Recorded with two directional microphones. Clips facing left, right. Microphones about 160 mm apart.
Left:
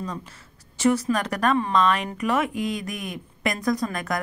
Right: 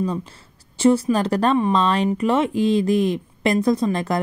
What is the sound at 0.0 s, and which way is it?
Speech, 30° right (ahead or behind).